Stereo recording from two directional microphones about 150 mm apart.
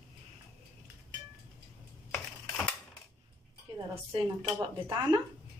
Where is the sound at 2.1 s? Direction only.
10° left (ahead or behind).